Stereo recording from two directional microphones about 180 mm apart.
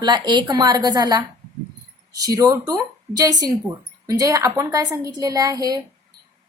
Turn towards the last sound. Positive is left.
turn(degrees=-20)  # may be behind; listen again after turning